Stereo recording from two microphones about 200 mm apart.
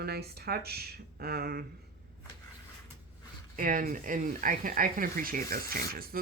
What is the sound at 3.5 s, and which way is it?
Speech, 45° right (ahead or behind).